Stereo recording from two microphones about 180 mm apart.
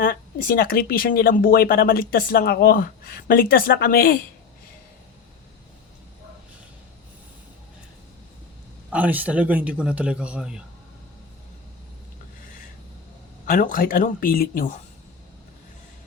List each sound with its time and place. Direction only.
0.0 s speech: 55° left (ahead or behind)
8.9 s a man's voice: 10° right (ahead or behind)
13.4 s speech: 50° left (ahead or behind)